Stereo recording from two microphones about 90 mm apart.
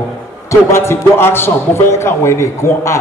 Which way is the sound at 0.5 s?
30° left (ahead or behind).